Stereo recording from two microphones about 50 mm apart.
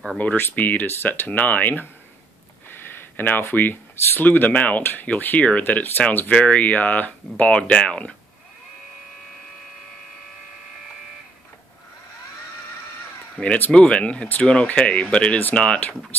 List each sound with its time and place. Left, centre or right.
0.2 s speech: left
0.8 s speech: left
1.2 s speech: left; by 8.1 s centre
13.4 s speech: left